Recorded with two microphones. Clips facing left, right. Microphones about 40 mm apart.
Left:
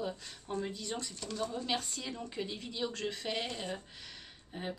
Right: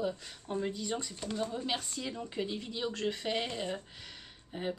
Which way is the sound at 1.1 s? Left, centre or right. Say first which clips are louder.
Right 2 dB; right.